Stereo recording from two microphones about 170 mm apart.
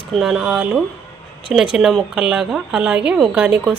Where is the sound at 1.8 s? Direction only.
Centre (ahead or behind).